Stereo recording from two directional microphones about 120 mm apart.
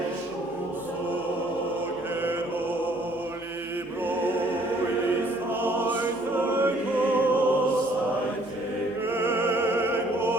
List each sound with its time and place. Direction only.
5.6 s music: 15° right (ahead or behind)
9.1 s opera: 20° right (ahead or behind)